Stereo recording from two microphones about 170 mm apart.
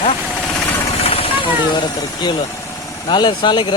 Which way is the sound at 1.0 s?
35° left (ahead or behind).